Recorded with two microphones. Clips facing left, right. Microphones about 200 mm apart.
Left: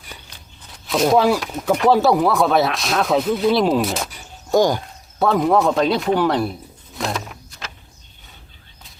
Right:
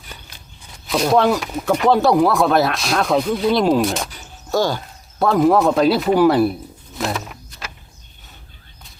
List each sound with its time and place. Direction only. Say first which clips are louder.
0.9 s speech: even; centre (ahead or behind)
4.5 s speech: left 3 dB; 15° left (ahead or behind)
5.2 s speech: right 2 dB; centre (ahead or behind)